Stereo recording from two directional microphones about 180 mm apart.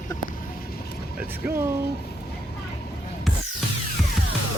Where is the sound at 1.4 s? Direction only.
10° right (ahead or behind).